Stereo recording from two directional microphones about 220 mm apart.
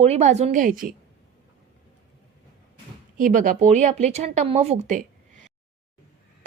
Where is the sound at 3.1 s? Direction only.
35° right (ahead or behind).